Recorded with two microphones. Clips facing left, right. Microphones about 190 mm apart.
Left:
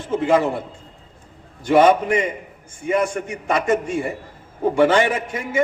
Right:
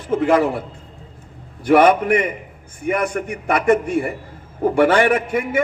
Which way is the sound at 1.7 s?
60° right (ahead or behind).